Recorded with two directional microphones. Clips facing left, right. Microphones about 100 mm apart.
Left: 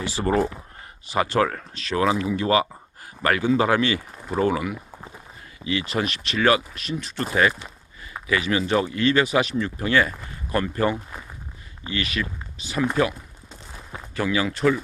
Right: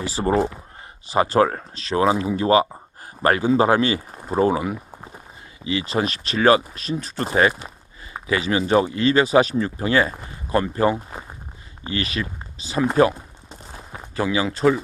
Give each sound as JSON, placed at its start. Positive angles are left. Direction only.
{"t": 0.0, "sound": "speech", "side_deg": -35}
{"t": 0.3, "sound": "speech", "side_deg": -20}
{"t": 1.0, "sound": "speech", "side_deg": -30}